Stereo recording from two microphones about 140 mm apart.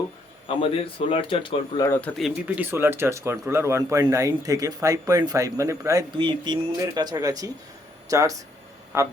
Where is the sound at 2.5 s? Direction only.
15° right (ahead or behind).